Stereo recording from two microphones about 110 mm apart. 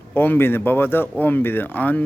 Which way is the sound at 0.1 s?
20° left (ahead or behind).